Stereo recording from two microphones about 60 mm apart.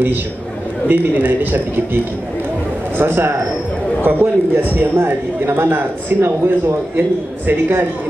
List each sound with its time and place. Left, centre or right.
0.8 s a man's voice: right
3.0 s a man's voice: right